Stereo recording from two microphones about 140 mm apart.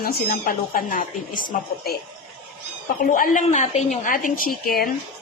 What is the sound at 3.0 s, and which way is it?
Speech, 85° left.